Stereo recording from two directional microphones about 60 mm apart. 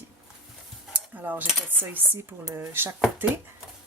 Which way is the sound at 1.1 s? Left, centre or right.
Right.